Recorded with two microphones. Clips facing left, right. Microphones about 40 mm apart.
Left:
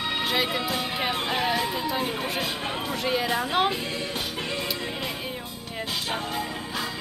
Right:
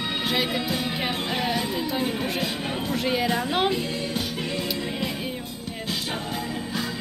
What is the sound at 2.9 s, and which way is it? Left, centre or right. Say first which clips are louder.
Speech: right 2 dB; centre.